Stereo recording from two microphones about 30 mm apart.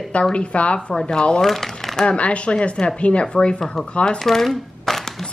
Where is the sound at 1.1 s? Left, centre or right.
Left.